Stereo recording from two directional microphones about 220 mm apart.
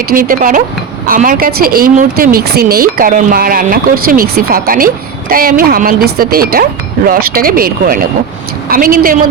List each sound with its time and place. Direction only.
0.1 s speech: 40° right (ahead or behind)